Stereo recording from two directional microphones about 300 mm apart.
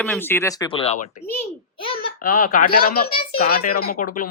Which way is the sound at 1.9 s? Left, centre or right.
Left.